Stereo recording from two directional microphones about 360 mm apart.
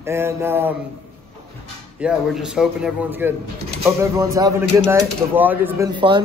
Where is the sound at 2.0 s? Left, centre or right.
Centre.